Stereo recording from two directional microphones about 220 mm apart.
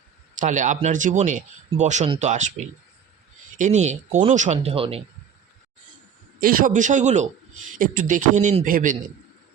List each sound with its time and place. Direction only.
0.3 s speech: 35° right (ahead or behind)
6.4 s speech: 40° right (ahead or behind)